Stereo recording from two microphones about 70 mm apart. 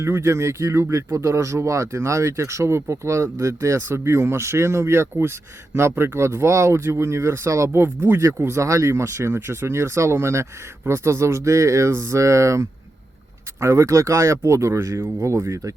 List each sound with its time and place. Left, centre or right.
0.0 s speech: right